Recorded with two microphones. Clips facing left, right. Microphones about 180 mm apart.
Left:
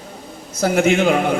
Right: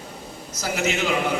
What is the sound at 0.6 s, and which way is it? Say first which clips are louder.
Speech: left 9 dB; 55° left (ahead or behind).